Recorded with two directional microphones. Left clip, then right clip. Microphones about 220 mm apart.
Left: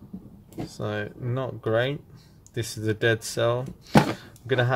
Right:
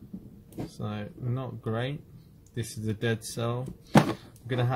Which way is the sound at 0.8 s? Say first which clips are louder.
Left 11 dB; 40° left (ahead or behind).